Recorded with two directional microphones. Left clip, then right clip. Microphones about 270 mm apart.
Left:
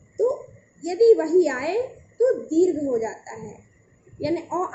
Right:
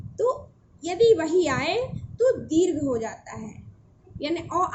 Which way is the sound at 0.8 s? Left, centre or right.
Right.